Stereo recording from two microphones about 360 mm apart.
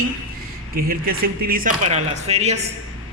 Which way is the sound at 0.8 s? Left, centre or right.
Right.